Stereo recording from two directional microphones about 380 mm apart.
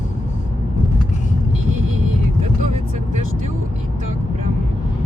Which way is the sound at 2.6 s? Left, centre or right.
Centre.